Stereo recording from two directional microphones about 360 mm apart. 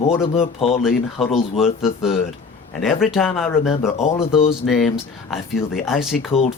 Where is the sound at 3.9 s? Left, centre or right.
Centre.